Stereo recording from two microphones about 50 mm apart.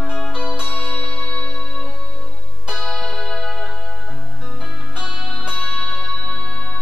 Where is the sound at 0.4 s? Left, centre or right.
Centre.